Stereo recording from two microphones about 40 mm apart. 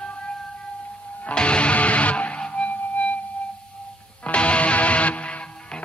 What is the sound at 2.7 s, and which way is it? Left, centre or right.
Music, left.